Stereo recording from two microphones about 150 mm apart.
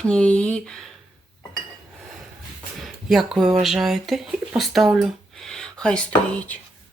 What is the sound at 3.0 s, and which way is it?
Speech, centre (ahead or behind).